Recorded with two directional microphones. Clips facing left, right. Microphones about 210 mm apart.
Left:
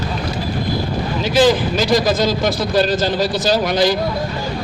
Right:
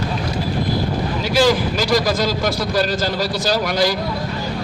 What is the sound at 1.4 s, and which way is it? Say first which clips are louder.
Speech: left 3 dB; 20° left (ahead or behind).